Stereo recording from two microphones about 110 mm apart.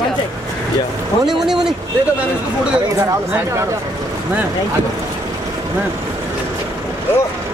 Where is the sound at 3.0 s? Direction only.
30° right (ahead or behind).